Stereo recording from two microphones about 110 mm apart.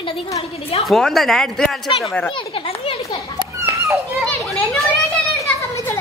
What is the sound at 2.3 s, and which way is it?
Children playing, 55° left (ahead or behind).